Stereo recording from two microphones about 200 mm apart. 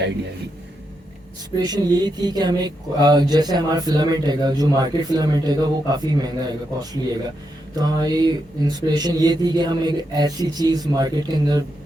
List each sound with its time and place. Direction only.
1.6 s speech: 20° right (ahead or behind)